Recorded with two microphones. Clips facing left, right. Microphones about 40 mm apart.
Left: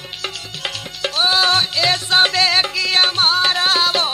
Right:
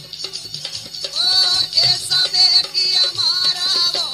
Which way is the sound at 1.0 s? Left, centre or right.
Left.